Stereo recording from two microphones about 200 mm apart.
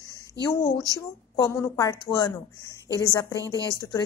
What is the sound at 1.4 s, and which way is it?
A woman's voice, 15° left (ahead or behind).